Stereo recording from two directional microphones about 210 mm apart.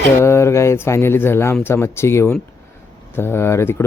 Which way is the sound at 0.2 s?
10° left (ahead or behind).